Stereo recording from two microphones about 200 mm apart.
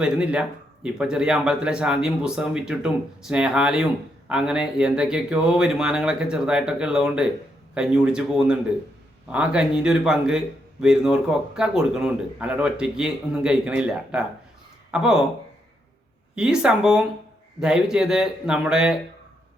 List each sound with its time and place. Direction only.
0.0 s a man's voice: 5° right (ahead or behind)
16.3 s a man's voice: 5° right (ahead or behind)